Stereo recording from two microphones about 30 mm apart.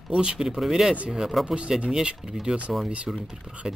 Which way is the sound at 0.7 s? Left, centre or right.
Centre.